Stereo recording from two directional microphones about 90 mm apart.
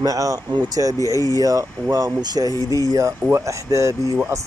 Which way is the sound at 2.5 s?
40° left (ahead or behind).